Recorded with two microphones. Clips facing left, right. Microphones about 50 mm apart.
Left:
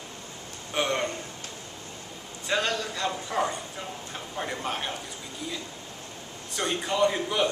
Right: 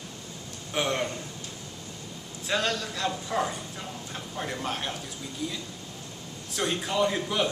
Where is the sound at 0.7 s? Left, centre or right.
Centre.